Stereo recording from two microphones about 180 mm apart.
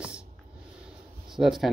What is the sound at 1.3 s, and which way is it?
Speech, centre (ahead or behind).